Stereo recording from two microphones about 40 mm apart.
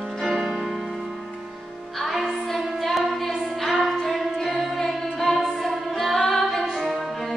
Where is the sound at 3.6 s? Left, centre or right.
Centre.